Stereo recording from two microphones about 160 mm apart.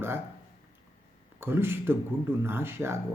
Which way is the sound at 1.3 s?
15° right (ahead or behind).